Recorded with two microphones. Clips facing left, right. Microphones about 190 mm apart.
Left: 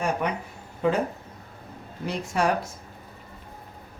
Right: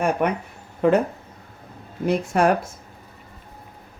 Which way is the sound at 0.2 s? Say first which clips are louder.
Right 6 dB; 60° right (ahead or behind).